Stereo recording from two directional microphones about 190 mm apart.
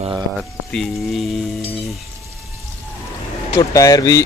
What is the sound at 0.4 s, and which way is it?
Speech, centre (ahead or behind).